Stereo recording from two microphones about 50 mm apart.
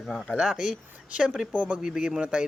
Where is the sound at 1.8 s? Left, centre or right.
Centre.